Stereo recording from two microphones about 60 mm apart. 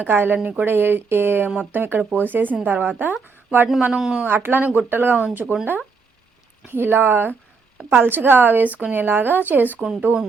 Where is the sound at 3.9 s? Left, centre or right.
Centre.